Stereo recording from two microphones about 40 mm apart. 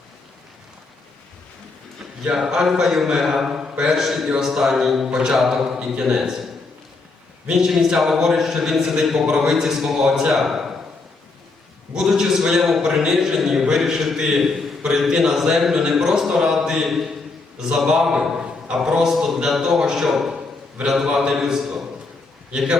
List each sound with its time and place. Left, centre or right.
2.3 s a man's voice: centre
3.6 s speech: right
3.9 s a man's voice: centre
7.6 s a man's voice: centre
11.9 s a man's voice: centre
17.8 s a man's voice: centre
20.1 s a man's voice: centre